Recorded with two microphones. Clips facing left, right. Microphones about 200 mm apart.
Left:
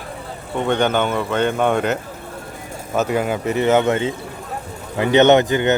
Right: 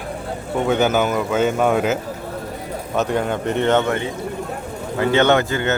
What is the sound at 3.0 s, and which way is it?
Speech, 5° left (ahead or behind).